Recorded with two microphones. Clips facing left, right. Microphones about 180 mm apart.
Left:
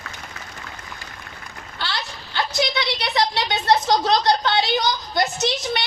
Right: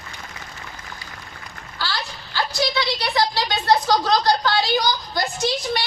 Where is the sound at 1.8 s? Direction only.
20° left (ahead or behind).